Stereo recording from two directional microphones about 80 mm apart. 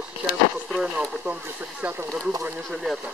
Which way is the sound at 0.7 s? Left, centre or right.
Centre.